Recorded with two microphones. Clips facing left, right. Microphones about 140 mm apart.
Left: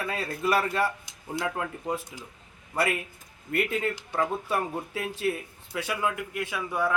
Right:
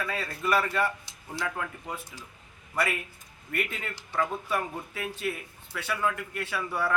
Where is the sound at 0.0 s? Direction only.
20° left (ahead or behind).